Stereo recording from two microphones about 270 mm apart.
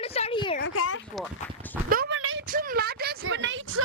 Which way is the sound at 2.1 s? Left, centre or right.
Right.